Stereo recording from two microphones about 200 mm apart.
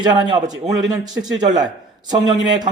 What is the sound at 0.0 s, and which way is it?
Speech, 20° right (ahead or behind).